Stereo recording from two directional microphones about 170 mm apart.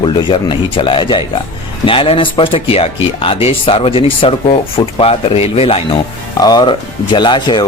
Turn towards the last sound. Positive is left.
turn(degrees=25)  # may be behind; listen again after turning